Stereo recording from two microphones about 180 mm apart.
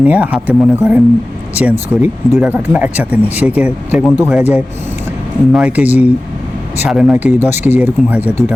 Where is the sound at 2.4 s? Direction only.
10° right (ahead or behind).